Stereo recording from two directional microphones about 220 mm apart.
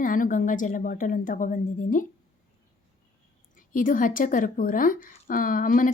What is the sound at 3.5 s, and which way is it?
A woman's voice, 40° left (ahead or behind).